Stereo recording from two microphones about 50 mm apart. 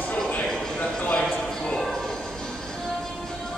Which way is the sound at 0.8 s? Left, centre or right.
Left.